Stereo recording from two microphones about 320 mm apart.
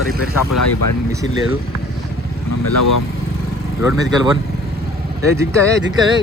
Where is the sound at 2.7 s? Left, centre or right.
Left.